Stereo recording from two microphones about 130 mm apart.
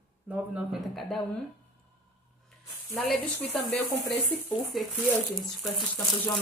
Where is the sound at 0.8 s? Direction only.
Centre (ahead or behind).